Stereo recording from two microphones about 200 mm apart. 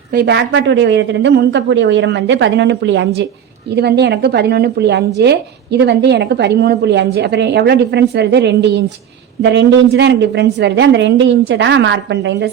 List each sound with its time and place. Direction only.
0.1 s speech: 55° right (ahead or behind)